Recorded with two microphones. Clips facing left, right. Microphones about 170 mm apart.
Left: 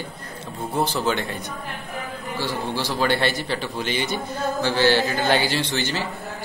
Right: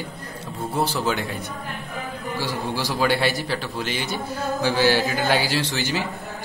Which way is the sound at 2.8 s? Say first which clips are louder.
Right 1 dB; 10° right (ahead or behind).